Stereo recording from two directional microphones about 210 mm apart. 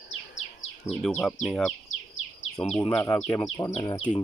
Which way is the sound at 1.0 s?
5° left (ahead or behind).